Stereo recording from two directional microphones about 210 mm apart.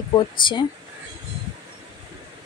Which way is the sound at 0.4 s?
20° left (ahead or behind).